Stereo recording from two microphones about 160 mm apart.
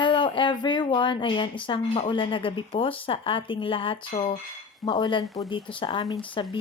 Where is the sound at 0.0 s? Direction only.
30° left (ahead or behind).